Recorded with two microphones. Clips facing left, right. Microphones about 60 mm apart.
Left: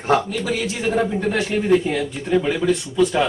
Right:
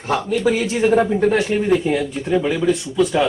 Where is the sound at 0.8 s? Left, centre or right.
Centre.